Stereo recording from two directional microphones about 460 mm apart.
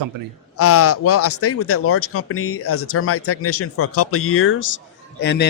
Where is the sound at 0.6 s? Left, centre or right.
Left.